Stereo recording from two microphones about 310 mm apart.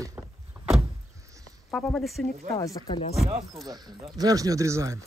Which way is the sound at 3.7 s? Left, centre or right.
Centre.